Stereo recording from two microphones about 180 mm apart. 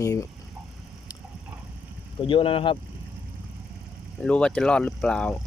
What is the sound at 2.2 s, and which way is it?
Speech, 30° left (ahead or behind).